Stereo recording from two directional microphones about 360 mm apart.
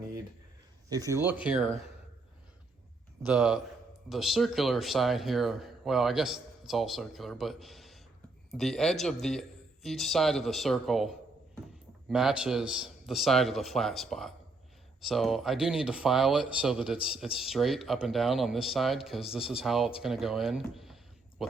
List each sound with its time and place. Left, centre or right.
0.9 s speech: centre
3.2 s speech: centre